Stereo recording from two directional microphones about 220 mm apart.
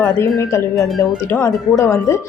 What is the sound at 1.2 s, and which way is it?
Speech, 10° left (ahead or behind).